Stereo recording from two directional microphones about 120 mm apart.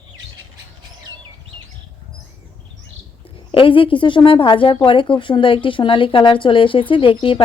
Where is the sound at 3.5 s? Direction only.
45° left (ahead or behind).